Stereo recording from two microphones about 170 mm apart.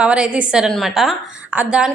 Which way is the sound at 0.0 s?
5° right (ahead or behind).